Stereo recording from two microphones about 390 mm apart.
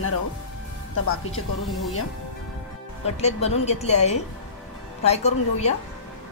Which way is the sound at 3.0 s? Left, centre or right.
Centre.